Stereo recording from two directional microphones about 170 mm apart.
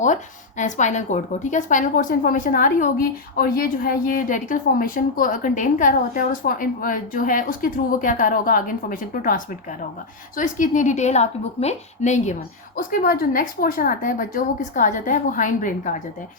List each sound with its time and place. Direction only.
0.0 s a woman's voice: 45° left (ahead or behind)